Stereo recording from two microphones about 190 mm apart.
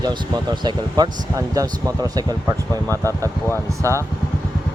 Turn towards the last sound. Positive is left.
turn(degrees=-15)  # may be behind; listen again after turning